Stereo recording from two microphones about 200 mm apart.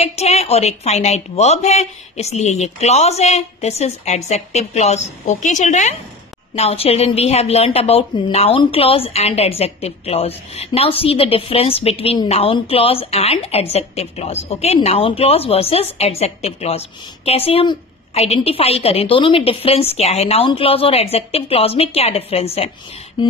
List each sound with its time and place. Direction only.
0.0 s a woman's voice: 30° left (ahead or behind)